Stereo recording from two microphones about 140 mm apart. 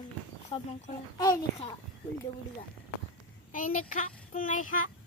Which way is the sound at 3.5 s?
75° left (ahead or behind).